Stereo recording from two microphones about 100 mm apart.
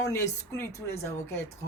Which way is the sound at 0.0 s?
30° left (ahead or behind).